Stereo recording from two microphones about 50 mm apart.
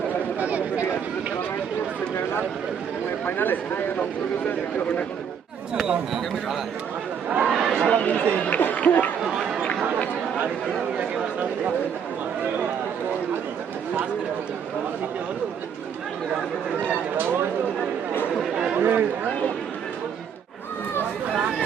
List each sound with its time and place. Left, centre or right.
0.3 s a sound: right
3.2 s speech: left
5.8 s speech: centre
7.3 s chatter: centre
7.7 s speech: centre
7.9 s speech: left
8.6 s chatter: left
10.9 s a sound: right
18.5 s chatter: centre
18.8 s speech: right